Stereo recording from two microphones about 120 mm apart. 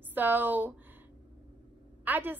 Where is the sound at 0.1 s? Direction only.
15° right (ahead or behind).